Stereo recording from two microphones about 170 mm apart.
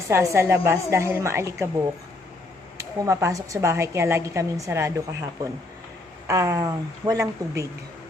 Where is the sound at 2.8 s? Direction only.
20° right (ahead or behind).